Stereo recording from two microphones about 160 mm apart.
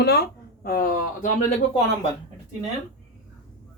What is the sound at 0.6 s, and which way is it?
Speech, 65° left (ahead or behind).